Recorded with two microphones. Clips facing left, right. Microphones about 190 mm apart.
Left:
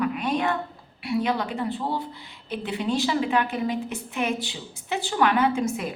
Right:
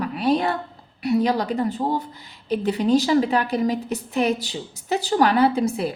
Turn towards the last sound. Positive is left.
turn(degrees=-35)  # may be behind; listen again after turning